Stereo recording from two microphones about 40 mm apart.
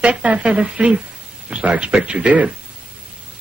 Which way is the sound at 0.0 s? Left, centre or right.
Right.